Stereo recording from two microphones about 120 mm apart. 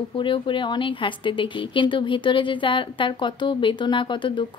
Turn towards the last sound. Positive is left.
turn(degrees=40)  # may be behind; listen again after turning